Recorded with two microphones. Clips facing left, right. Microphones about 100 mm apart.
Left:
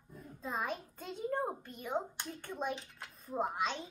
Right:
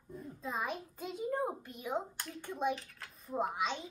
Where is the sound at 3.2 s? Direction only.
Centre (ahead or behind).